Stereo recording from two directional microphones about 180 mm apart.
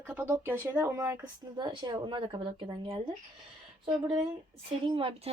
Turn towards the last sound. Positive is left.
turn(degrees=-30)  # may be behind; listen again after turning